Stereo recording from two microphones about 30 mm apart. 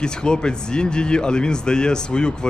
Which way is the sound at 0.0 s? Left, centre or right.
Left.